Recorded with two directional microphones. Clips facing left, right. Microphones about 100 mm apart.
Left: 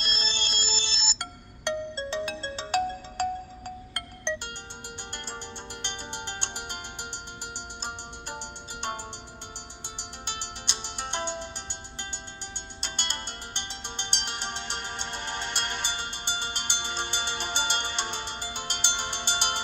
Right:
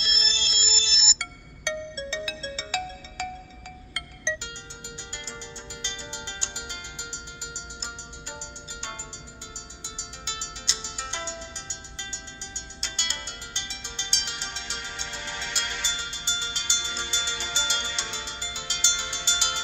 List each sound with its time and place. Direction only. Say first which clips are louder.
0.0 s telephone bell ringing: left 1 dB; 55° left (ahead or behind)
1.6 s ringtone: left 2 dB; 50° left (ahead or behind)
5.1 s music: left 2 dB; 55° left (ahead or behind)
10.7 s music: left 2 dB; 55° left (ahead or behind)
12.8 s music: left 1 dB; 50° left (ahead or behind)